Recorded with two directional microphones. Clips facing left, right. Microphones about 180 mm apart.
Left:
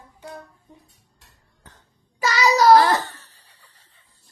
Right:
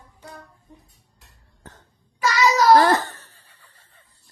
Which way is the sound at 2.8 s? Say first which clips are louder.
Right 2 dB; 50° right (ahead or behind).